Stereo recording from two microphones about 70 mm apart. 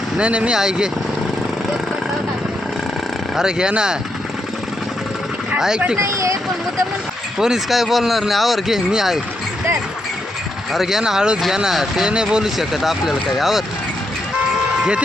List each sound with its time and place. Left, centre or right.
0.2 s speech: centre
3.3 s speech: centre
5.5 s speech: centre
6.0 s speech: right
7.3 s speech: centre
10.7 s speech: centre